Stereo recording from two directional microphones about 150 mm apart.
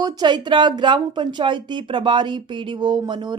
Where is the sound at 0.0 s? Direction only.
30° right (ahead or behind).